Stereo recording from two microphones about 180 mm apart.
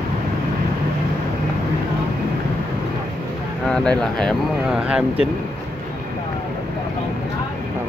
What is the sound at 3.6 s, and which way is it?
Speech, 5° left (ahead or behind).